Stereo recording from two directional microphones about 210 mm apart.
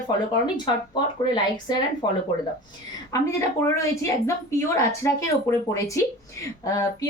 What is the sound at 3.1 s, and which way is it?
Speech, 15° left (ahead or behind).